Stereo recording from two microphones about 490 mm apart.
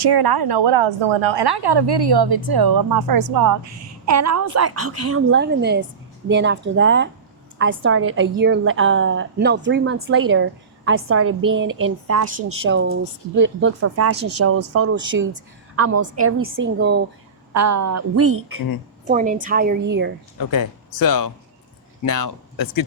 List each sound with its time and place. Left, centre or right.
0.0 s a woman's voice: right
17.5 s a woman's voice: right
19.0 s a woman's voice: centre
20.4 s speech: left